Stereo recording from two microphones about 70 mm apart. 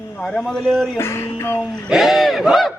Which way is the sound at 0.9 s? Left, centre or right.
Left.